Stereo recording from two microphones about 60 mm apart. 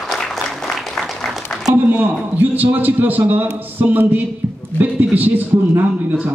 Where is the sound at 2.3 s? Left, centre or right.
Right.